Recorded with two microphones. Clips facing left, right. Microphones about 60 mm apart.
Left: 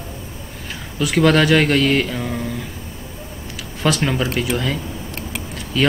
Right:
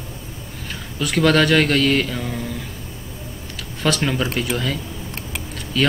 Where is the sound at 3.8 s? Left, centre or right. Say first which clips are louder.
Left 1 dB; centre.